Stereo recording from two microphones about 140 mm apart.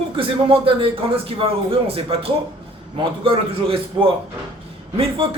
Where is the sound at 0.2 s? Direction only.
40° right (ahead or behind).